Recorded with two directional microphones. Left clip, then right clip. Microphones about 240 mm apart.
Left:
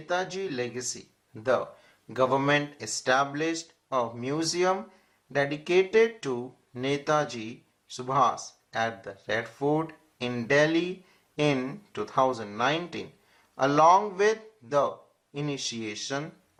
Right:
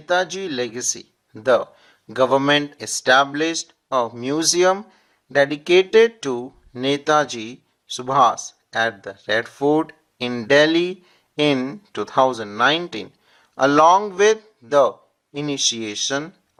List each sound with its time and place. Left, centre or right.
0.1 s speech: right
2.0 s speech: right